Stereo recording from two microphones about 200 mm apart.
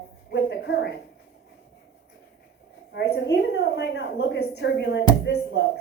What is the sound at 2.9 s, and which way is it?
A woman's voice, 60° left (ahead or behind).